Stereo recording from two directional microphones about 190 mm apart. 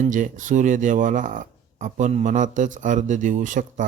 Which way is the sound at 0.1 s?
40° right (ahead or behind).